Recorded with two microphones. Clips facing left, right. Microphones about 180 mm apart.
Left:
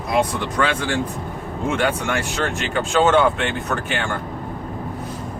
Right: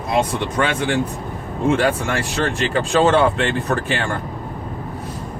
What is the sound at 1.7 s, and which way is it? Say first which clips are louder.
Speech: right 3 dB; 35° right (ahead or behind).